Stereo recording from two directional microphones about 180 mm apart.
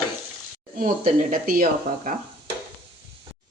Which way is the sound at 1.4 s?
50° right (ahead or behind).